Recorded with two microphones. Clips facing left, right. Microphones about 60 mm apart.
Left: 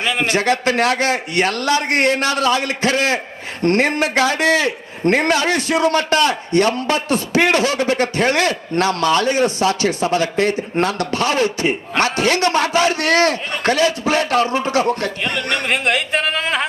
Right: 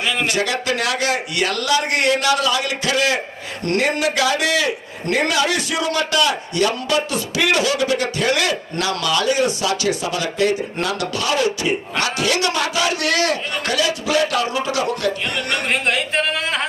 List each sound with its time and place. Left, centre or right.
0.3 s a man's voice: left
15.7 s speech: centre